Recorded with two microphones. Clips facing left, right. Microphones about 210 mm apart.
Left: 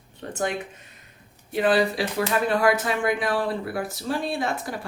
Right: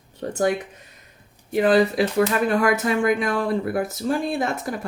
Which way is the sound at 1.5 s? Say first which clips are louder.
Right 4 dB; 45° right (ahead or behind).